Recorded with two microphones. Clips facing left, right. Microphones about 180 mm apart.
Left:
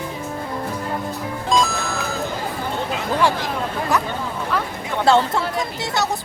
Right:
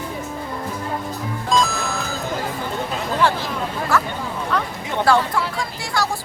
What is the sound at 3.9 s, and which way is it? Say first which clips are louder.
Speech: right 3 dB; 15° left (ahead or behind).